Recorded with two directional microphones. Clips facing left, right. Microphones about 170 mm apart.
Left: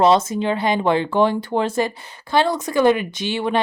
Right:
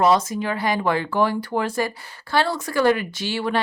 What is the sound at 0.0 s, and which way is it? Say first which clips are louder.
Speech: left 3 dB; 25° left (ahead or behind).